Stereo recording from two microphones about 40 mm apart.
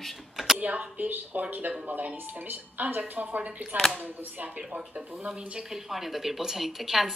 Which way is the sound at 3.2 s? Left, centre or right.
Right.